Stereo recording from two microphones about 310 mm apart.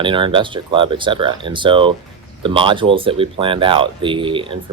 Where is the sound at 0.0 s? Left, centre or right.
Centre.